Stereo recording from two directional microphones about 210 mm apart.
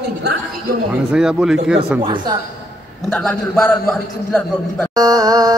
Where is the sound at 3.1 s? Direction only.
5° left (ahead or behind).